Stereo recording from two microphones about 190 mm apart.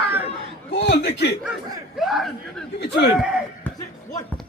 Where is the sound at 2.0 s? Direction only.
Centre (ahead or behind).